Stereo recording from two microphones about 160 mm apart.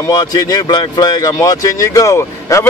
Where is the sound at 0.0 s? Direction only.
25° left (ahead or behind).